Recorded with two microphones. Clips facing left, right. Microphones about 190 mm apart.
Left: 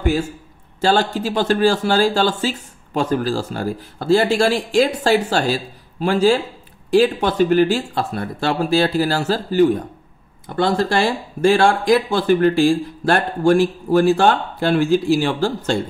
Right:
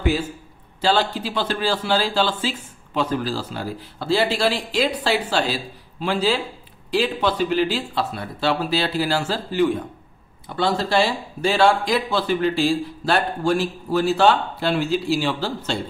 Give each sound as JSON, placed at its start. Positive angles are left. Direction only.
{"t": 0.0, "sound": "a man's voice", "side_deg": 45}